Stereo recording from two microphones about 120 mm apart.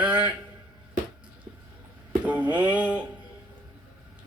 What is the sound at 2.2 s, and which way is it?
Speech, 10° right (ahead or behind).